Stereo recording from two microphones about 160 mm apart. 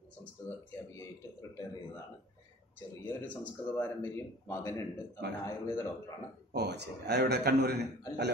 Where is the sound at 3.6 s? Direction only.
10° left (ahead or behind).